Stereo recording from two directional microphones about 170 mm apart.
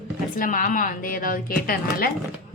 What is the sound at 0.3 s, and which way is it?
A woman's voice, 50° left (ahead or behind).